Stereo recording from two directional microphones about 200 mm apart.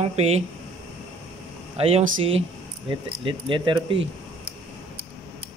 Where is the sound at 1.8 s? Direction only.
30° right (ahead or behind).